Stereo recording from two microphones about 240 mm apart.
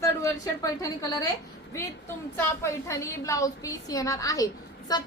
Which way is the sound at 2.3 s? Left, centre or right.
Centre.